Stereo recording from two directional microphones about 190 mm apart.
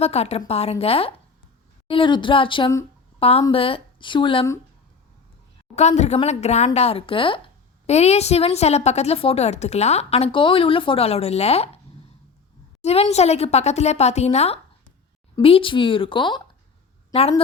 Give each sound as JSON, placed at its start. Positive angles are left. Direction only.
{"t": 0.0, "sound": "a woman's voice", "side_deg": 35}
{"t": 5.7, "sound": "a woman's voice", "side_deg": 35}
{"t": 12.8, "sound": "a woman's voice", "side_deg": 35}